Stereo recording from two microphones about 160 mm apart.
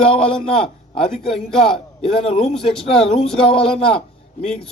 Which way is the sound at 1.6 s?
35° left (ahead or behind).